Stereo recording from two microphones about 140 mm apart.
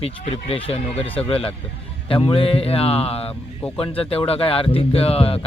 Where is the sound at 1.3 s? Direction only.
40° left (ahead or behind).